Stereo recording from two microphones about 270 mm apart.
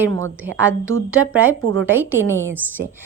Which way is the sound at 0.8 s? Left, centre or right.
Right.